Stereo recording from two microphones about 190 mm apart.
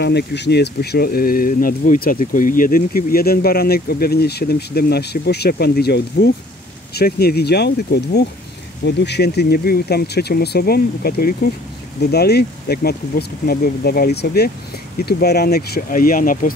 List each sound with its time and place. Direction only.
0.0 s speech: 60° left (ahead or behind); by 16.5 s 45° left (ahead or behind)